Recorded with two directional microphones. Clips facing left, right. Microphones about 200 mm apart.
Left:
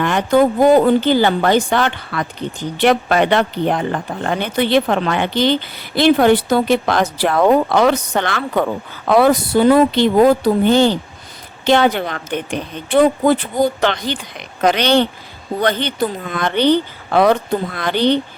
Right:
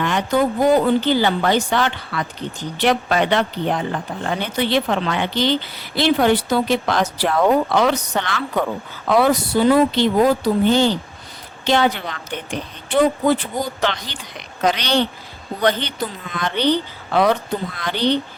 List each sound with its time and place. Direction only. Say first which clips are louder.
0.0 s speech: left 5 dB; 50° left (ahead or behind)